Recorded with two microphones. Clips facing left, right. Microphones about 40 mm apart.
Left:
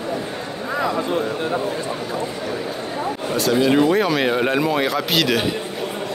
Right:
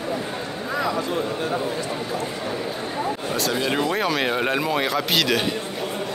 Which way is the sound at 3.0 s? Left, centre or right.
Centre.